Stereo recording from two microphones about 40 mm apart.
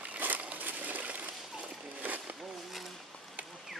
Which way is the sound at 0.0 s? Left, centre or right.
Right.